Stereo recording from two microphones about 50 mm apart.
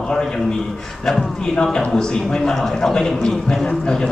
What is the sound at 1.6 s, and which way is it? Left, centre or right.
A man's voice, centre.